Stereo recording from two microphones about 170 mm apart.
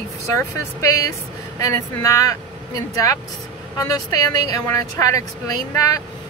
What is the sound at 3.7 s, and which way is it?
Speech, 20° left (ahead or behind).